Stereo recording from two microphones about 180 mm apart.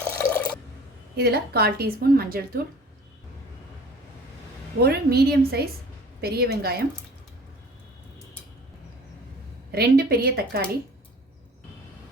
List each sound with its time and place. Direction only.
0.0 s water: 10° left (ahead or behind)
1.1 s a woman's voice: 60° right (ahead or behind)
4.8 s a woman's voice: 60° right (ahead or behind)
9.7 s a woman's voice: 60° right (ahead or behind)